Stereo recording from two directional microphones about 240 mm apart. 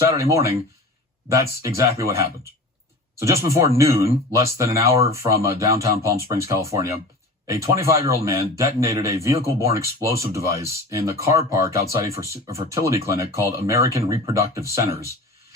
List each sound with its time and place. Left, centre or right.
0.0 s a man's voice: centre